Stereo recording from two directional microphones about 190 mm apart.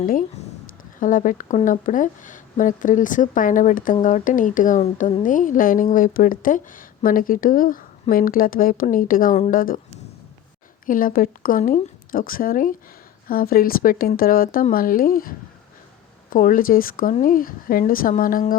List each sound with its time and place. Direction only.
0.0 s speech: 45° left (ahead or behind)
10.8 s speech: 45° left (ahead or behind)